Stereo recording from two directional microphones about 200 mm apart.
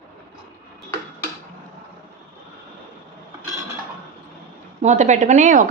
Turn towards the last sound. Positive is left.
turn(degrees=-40)  # may be behind; listen again after turning